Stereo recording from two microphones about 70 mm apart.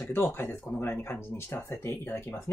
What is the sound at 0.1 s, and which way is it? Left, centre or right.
Speech, left.